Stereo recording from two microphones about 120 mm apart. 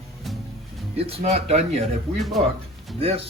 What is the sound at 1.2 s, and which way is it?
Speech, 65° right (ahead or behind).